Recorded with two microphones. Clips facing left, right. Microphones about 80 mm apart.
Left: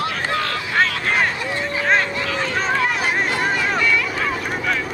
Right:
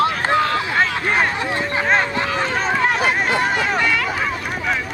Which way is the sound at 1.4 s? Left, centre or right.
Right.